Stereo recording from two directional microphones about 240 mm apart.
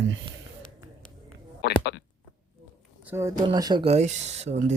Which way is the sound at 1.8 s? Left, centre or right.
Left.